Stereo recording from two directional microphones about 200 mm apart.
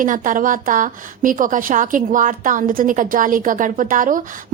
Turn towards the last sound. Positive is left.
turn(degrees=-40)  # may be behind; listen again after turning